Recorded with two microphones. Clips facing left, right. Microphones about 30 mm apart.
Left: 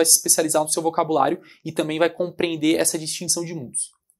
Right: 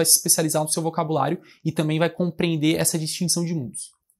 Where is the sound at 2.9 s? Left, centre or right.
Centre.